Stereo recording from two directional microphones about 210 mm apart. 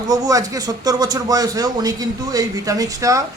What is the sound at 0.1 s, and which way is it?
Speech, 15° right (ahead or behind).